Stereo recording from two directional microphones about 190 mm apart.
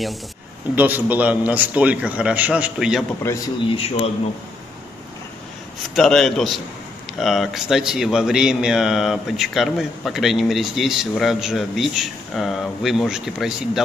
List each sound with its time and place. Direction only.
0.7 s a man's voice: 10° right (ahead or behind)
3.6 s speech: 30° left (ahead or behind)
5.9 s speech: centre (ahead or behind)